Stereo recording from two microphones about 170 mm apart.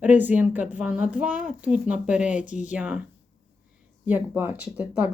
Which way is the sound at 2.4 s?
45° left (ahead or behind).